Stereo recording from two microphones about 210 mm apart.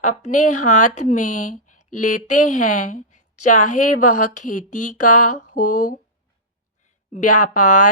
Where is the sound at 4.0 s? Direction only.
90° left.